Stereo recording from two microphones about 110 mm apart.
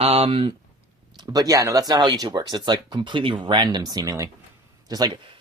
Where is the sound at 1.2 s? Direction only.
35° right (ahead or behind).